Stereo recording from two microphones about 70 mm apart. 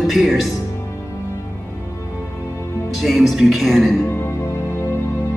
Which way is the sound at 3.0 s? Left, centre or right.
Centre.